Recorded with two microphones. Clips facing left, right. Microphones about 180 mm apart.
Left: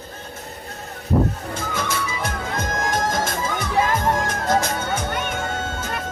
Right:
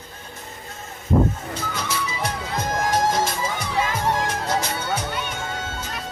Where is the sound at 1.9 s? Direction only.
50° left (ahead or behind).